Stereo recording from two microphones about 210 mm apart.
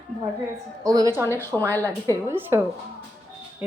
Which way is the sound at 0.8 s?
15° right (ahead or behind).